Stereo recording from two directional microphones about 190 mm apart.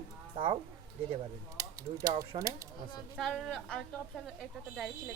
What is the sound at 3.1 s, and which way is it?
Speech, centre (ahead or behind).